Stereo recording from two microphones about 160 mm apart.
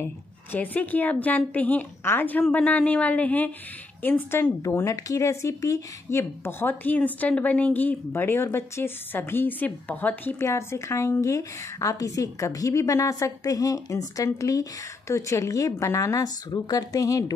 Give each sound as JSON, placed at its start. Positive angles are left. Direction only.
{"t": 0.0, "sound": "speech", "side_deg": 10}